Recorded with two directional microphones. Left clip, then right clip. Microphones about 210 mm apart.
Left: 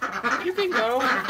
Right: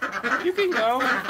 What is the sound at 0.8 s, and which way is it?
Duck, 10° right (ahead or behind).